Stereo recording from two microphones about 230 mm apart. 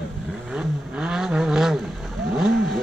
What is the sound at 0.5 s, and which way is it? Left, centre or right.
Vehicle, centre.